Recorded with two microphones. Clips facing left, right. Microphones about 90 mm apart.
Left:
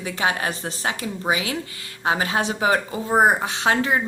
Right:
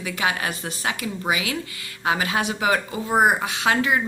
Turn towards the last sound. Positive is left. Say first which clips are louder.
# even
turn(degrees=35)  # may be behind; listen again after turning